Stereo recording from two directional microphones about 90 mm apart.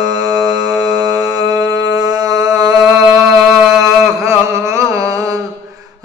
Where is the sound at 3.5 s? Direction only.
Centre (ahead or behind).